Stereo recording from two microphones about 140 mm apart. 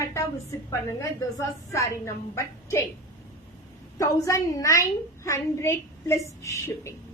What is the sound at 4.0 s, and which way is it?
A woman's voice, 25° left (ahead or behind).